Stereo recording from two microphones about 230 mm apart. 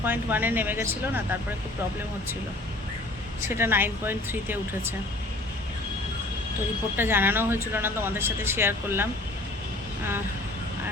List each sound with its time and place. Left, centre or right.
0.0 s speech: centre
3.4 s speech: centre
6.9 s speech: centre